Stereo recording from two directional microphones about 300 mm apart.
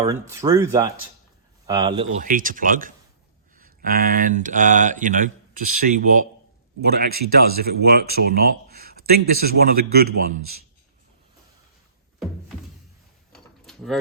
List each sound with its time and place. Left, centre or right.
0.0 s speech: centre
2.1 s a man's voice: right
13.3 s mechanisms: centre